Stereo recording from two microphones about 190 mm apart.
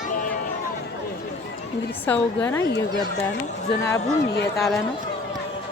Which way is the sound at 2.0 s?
10° left (ahead or behind).